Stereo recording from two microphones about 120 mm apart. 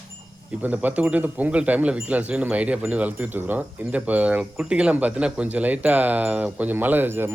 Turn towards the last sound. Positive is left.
turn(degrees=-20)  # may be behind; listen again after turning